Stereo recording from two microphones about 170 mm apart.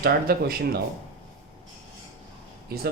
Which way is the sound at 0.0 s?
65° right (ahead or behind).